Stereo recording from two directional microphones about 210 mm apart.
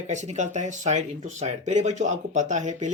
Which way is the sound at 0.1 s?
35° right (ahead or behind).